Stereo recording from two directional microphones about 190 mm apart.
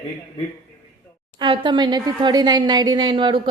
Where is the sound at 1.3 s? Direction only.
25° right (ahead or behind).